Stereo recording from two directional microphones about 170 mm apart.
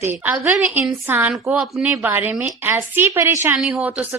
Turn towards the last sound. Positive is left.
turn(degrees=-10)  # may be behind; listen again after turning